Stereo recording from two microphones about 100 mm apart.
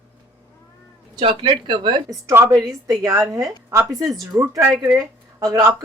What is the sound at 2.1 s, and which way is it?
A woman's voice, 30° right (ahead or behind).